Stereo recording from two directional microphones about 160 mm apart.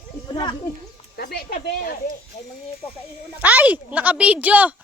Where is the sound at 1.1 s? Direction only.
80° left; by 2.2 s 60° left (ahead or behind).